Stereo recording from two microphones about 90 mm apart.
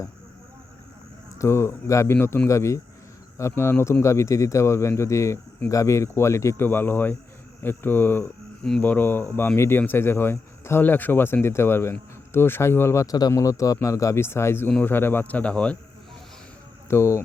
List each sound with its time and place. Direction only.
1.4 s speech: 30° left (ahead or behind)
13.1 s speech: 45° left (ahead or behind); by 15.8 s 10° left (ahead or behind)
16.9 s speech: 30° left (ahead or behind)